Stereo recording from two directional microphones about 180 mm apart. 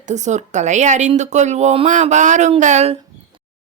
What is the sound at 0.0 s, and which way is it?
Speech, 40° right (ahead or behind).